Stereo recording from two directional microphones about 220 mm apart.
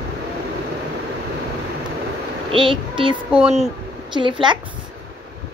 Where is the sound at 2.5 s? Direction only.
25° right (ahead or behind).